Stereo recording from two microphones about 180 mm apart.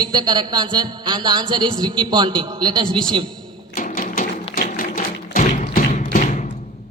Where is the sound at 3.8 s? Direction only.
50° left (ahead or behind).